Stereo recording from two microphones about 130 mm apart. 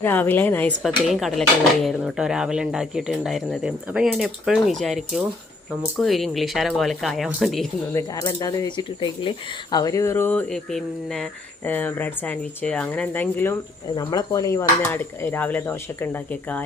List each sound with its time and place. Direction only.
0.0 s speech: 15° left (ahead or behind)
0.8 s cutlery: centre (ahead or behind)
7.9 s speech: 25° left (ahead or behind)
9.7 s a sound: 25° left (ahead or behind)
10.5 s speech: 5° left (ahead or behind)
14.0 s speech: 25° left (ahead or behind)